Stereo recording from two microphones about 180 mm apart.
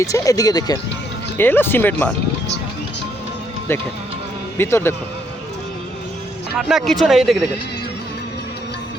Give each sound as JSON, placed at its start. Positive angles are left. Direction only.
{"t": 0.0, "sound": "speech", "side_deg": 20}
{"t": 3.7, "sound": "speech", "side_deg": 10}
{"t": 6.6, "sound": "speech", "side_deg": 0}